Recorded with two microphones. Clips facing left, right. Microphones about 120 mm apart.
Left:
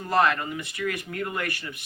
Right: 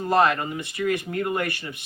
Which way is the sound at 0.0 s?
25° right (ahead or behind).